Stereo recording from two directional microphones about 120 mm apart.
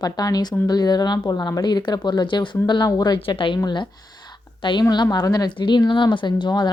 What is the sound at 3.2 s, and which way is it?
A woman's voice, 45° left (ahead or behind).